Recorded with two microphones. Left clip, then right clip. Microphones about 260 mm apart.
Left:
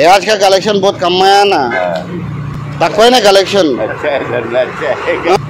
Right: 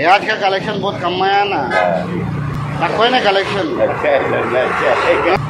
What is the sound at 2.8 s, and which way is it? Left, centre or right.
Speech, left.